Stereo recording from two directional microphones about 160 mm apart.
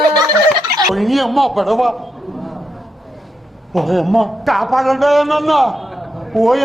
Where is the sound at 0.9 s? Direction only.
Centre (ahead or behind).